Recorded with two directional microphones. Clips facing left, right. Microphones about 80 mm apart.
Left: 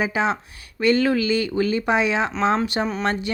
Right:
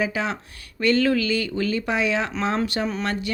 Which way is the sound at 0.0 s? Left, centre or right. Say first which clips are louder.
Left 3 dB; left.